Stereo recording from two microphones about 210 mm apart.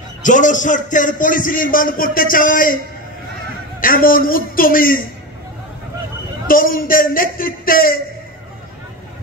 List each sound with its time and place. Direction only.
0.2 s a man's voice: 35° left (ahead or behind)
3.8 s a man's voice: 40° left (ahead or behind)
6.4 s a man's voice: 40° left (ahead or behind)